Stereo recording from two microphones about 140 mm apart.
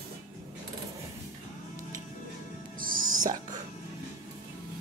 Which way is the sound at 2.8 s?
70° right (ahead or behind).